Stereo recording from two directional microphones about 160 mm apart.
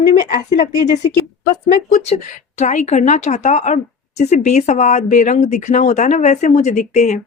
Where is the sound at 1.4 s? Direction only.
50° left (ahead or behind).